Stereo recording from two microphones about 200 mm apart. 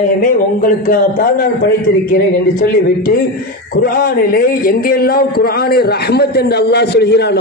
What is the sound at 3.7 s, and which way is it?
A man's voice, 50° left (ahead or behind).